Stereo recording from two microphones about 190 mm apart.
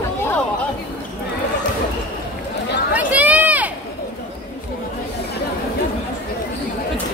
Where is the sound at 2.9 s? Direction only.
10° right (ahead or behind).